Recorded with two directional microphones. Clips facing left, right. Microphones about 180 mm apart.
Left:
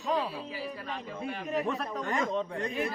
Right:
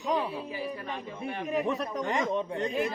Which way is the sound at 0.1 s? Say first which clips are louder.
Right 1 dB; 20° right (ahead or behind).